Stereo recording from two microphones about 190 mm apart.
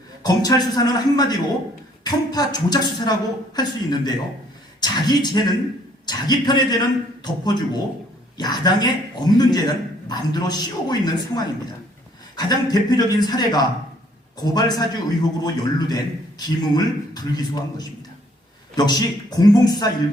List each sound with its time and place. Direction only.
0.2 s a man's voice: 20° left (ahead or behind)